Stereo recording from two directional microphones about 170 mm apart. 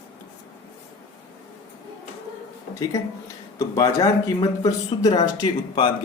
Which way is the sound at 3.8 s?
20° left (ahead or behind).